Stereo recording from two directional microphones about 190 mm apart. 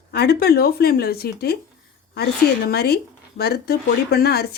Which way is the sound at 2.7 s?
55° left (ahead or behind).